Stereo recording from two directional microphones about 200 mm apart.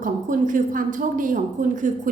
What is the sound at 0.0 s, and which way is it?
A woman's voice, 40° right (ahead or behind).